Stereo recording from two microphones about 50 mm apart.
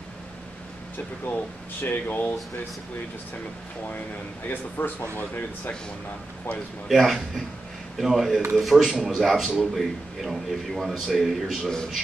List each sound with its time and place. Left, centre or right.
1.2 s speech: left
4.5 s speech: left
6.9 s a man's voice: centre